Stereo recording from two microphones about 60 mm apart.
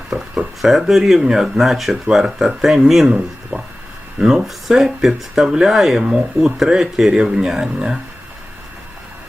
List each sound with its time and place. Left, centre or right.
0.1 s speech: centre
3.5 s a sound: right
4.2 s speech: centre